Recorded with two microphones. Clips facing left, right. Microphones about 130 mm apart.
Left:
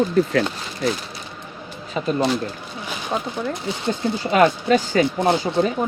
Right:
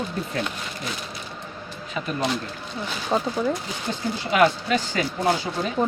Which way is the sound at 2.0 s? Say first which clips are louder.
Left 7 dB; 30° left (ahead or behind).